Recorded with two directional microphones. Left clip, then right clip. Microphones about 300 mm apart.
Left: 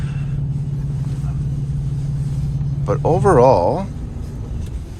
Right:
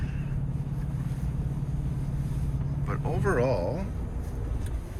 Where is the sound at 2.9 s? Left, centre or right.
Centre.